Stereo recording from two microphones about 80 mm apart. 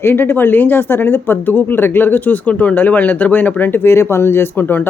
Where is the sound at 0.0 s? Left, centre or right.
Left.